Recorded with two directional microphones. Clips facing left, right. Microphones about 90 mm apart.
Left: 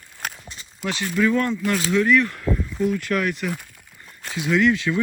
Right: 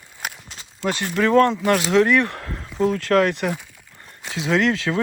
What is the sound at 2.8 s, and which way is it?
Speech, 90° right.